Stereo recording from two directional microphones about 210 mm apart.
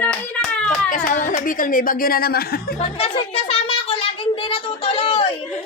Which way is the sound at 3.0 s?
30° left (ahead or behind).